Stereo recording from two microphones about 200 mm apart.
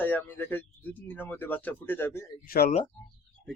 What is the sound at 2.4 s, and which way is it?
Speech, 45° left (ahead or behind).